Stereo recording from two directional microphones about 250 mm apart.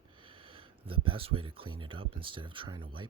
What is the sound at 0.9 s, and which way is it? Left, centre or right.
Speech, right.